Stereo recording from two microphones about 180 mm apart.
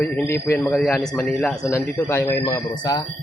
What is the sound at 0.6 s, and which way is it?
A man's voice, centre (ahead or behind).